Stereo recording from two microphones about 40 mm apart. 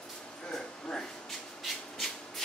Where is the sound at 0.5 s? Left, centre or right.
Centre.